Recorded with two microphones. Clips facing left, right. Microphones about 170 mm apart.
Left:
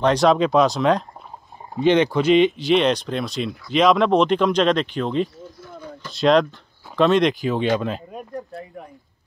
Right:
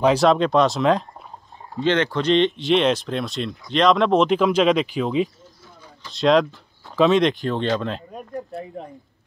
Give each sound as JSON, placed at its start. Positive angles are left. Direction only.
{"t": 0.0, "sound": "speech", "side_deg": 0}
{"t": 1.8, "sound": "speech", "side_deg": 15}
{"t": 5.6, "sound": "a sound", "side_deg": 65}
{"t": 6.1, "sound": "speech", "side_deg": 0}